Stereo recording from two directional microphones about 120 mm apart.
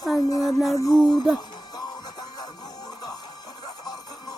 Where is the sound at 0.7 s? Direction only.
35° left (ahead or behind).